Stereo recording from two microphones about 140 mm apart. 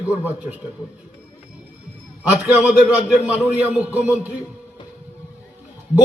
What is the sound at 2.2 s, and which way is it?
A man's voice, 10° right (ahead or behind).